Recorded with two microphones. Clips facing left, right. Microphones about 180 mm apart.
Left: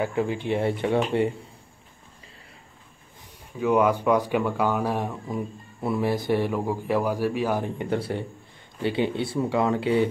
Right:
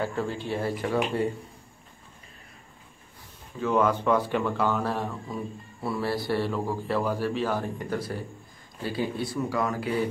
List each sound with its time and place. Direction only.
0.0 s speech: 15° left (ahead or behind)
3.5 s speech: 15° left (ahead or behind)